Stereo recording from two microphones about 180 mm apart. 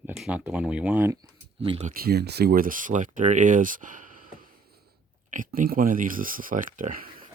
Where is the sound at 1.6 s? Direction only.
30° right (ahead or behind).